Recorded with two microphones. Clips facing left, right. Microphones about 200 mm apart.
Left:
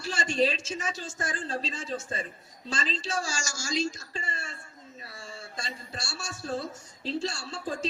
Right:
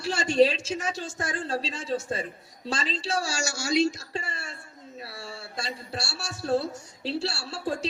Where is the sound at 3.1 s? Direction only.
65° right (ahead or behind).